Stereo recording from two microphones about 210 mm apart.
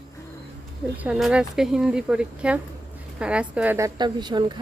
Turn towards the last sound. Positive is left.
turn(degrees=-20)  # may be behind; listen again after turning